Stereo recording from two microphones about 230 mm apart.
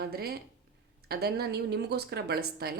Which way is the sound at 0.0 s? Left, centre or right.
Right.